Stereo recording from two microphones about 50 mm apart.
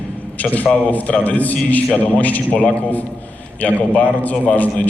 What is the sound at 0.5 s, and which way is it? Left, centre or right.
A man's voice, left.